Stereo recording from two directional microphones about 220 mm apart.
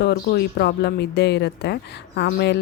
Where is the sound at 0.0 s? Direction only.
45° left (ahead or behind).